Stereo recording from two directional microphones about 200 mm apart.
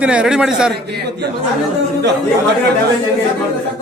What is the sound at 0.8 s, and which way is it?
Speech, 55° right (ahead or behind).